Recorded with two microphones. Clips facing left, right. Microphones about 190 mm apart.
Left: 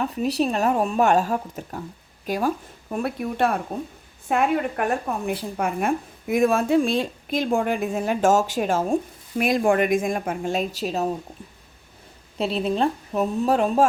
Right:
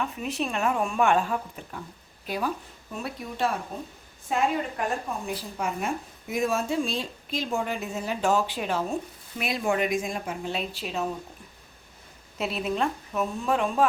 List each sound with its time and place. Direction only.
0.0 s speech: 35° left (ahead or behind)
2.9 s a woman's voice: 60° left (ahead or behind); by 11.1 s 40° left (ahead or behind)
12.4 s speech: 30° left (ahead or behind)